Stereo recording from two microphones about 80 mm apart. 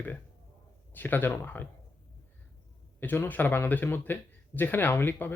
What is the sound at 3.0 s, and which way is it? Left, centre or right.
Speech, left.